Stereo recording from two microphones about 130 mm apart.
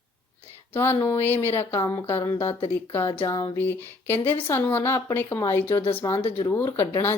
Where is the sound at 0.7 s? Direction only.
15° left (ahead or behind).